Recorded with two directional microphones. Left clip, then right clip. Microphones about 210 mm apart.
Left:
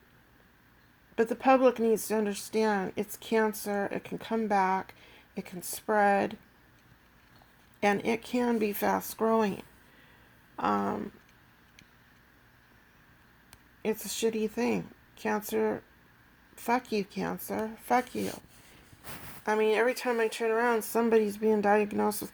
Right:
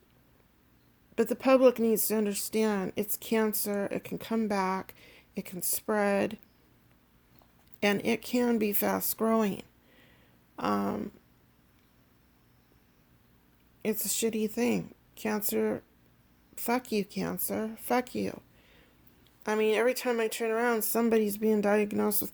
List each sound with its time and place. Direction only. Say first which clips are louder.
1.1 s speech: even; 50° right (ahead or behind)
7.8 s speech: left 1 dB; 50° right (ahead or behind)
13.8 s speech: left 1 dB; 50° right (ahead or behind)